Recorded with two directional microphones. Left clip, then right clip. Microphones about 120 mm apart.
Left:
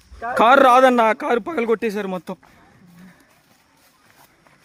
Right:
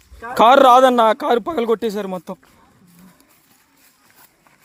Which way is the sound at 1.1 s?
30° right (ahead or behind).